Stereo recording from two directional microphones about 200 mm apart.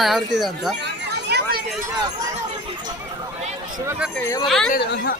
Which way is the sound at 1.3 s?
50° right (ahead or behind).